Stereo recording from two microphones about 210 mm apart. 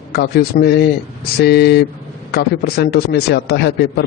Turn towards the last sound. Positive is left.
turn(degrees=50)  # may be behind; listen again after turning